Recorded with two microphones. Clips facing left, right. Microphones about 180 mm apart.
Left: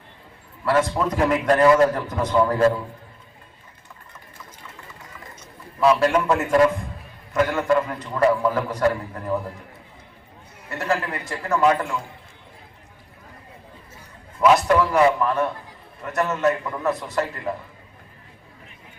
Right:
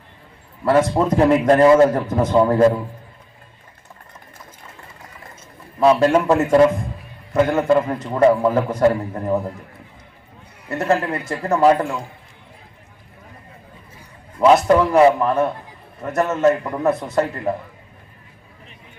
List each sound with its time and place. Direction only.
0.7 s a man's voice: 30° right (ahead or behind)
1.9 s a man's voice: 40° right (ahead or behind)
5.8 s a man's voice: 30° right (ahead or behind)
8.9 s a man's voice: 40° right (ahead or behind)
11.0 s a man's voice: 40° right (ahead or behind)
14.3 s a man's voice: 35° right (ahead or behind)
17.2 s a man's voice: 40° right (ahead or behind)